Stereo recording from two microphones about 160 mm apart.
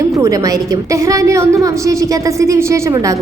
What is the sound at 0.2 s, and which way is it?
A woman's voice, 20° right (ahead or behind).